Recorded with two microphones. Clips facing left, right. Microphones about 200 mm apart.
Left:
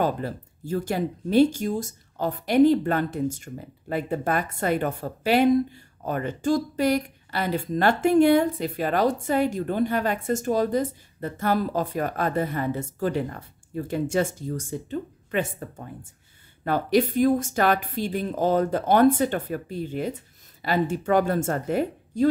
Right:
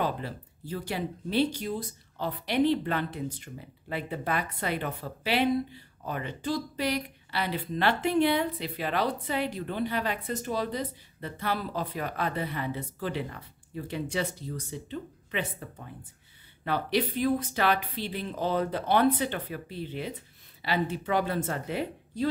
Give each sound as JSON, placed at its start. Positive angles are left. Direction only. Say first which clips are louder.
{"t": 0.0, "sound": "speech", "louder": "left 6 dB", "side_deg": 45}